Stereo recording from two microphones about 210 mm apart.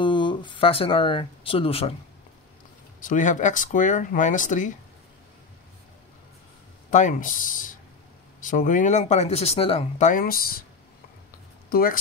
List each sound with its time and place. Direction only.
0.0 s speech: 20° left (ahead or behind)
3.0 s speech: 40° left (ahead or behind)
6.9 s speech: 35° left (ahead or behind)
11.7 s speech: 45° left (ahead or behind)